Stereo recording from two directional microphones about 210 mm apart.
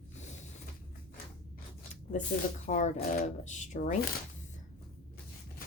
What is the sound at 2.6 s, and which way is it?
Speech, 35° left (ahead or behind).